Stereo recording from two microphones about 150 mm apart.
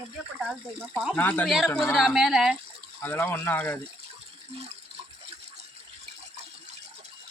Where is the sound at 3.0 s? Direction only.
15° left (ahead or behind).